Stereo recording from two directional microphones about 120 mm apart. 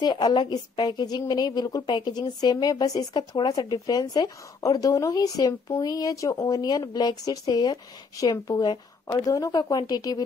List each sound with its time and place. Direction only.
0.0 s a woman's voice: 40° left (ahead or behind)